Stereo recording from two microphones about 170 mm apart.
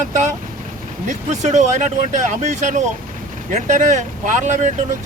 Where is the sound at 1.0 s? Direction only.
45° right (ahead or behind).